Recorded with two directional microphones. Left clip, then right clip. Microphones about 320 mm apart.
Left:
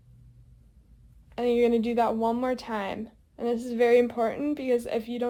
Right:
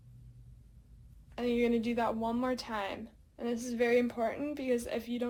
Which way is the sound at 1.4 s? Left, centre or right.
Left.